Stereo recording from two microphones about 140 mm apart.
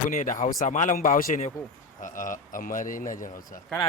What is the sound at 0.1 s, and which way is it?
A man's voice, 70° left (ahead or behind).